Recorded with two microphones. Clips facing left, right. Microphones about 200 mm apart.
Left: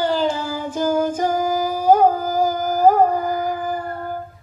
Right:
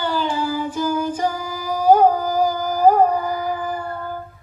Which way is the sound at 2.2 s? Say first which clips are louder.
Even; 45° left (ahead or behind).